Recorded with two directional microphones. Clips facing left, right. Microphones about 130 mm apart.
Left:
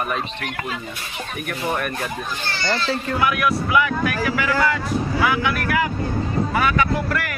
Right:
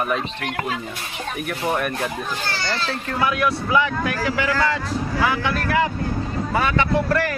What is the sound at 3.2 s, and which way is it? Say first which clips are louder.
Speech: right 1 dB; 30° right (ahead or behind).